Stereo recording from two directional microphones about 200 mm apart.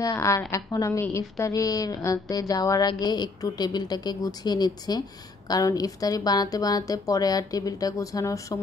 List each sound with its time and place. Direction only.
0.0 s a woman's voice: 15° left (ahead or behind)